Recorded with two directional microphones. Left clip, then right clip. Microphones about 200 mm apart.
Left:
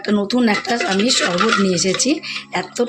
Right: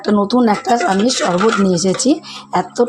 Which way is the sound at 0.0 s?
20° right (ahead or behind).